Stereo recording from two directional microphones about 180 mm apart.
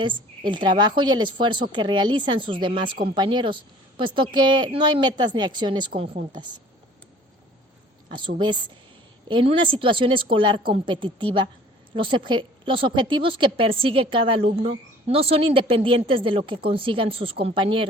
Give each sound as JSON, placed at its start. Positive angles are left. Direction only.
{"t": 0.0, "sound": "speech", "side_deg": -25}
{"t": 9.3, "sound": "speech", "side_deg": -30}